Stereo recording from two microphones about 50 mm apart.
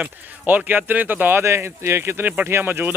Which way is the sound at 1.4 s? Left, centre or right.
Right.